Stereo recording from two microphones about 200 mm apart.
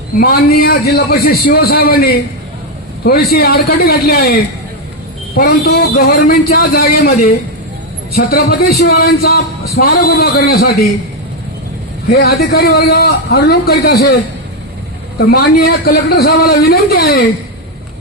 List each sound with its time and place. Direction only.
0.2 s a man's voice: 50° left (ahead or behind)
12.0 s a man's voice: 50° left (ahead or behind)
15.2 s a man's voice: 50° left (ahead or behind)